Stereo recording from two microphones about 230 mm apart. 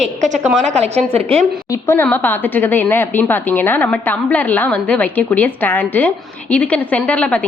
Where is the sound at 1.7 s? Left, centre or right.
Centre.